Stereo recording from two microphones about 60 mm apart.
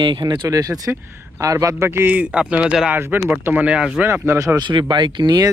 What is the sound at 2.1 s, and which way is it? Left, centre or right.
Speech, centre.